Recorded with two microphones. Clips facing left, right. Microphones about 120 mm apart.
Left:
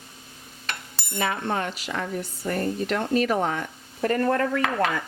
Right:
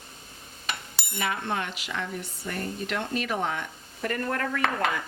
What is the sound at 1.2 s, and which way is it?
A woman's voice, 35° left (ahead or behind).